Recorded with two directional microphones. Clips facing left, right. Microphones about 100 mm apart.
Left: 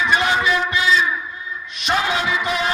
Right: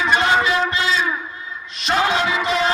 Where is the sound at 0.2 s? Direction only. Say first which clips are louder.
Right 2 dB; 30° right (ahead or behind).